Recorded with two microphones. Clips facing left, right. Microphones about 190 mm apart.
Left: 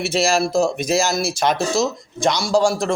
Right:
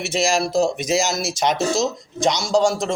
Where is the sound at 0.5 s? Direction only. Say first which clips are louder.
Left 1 dB; 20° right (ahead or behind).